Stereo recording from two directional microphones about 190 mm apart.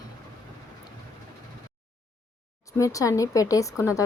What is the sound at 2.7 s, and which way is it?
Speech, 15° left (ahead or behind).